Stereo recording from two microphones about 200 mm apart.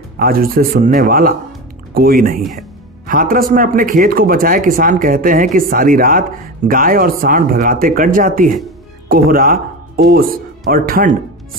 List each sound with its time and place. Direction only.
0.2 s speech: 45° right (ahead or behind)